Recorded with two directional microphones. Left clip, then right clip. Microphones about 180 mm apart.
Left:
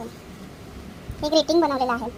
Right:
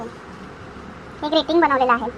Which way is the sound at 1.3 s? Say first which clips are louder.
Right 1 dB; 40° left (ahead or behind).